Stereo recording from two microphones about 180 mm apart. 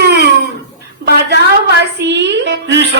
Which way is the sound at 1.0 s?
70° right (ahead or behind).